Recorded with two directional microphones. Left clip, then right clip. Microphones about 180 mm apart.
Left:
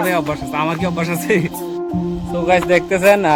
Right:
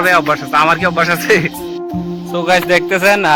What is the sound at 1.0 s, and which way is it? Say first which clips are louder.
Speech: right 3 dB; 50° right (ahead or behind).